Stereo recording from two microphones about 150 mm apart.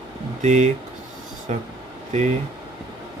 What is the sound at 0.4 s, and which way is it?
Speech, 50° right (ahead or behind).